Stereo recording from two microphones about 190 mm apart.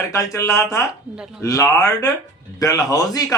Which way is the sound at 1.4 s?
15° left (ahead or behind).